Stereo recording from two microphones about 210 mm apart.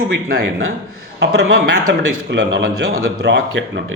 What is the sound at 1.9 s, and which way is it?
A man's voice, 60° right (ahead or behind).